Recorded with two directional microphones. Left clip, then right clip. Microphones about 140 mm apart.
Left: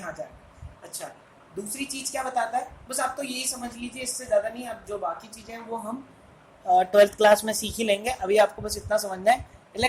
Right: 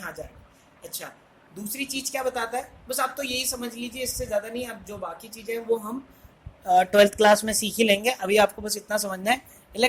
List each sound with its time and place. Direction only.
0.8 s a sound: 55° right (ahead or behind)
1.7 s a woman's voice: 55° right (ahead or behind)
6.7 s speech: 40° right (ahead or behind)